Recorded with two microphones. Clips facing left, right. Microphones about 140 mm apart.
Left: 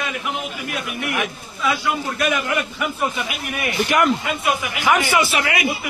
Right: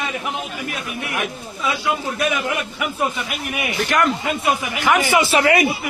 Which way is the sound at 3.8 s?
10° left (ahead or behind).